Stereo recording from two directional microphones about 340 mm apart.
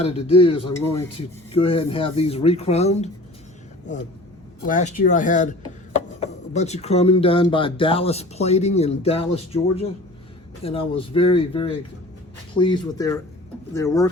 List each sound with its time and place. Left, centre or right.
0.0 s speech: centre
4.6 s speech: left